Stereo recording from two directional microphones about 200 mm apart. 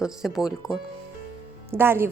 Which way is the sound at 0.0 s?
Centre (ahead or behind).